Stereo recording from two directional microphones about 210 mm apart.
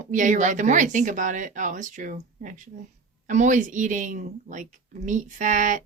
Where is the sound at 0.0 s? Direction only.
35° right (ahead or behind).